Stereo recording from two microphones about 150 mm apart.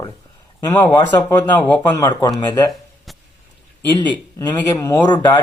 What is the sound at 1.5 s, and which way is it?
Speech, 10° left (ahead or behind).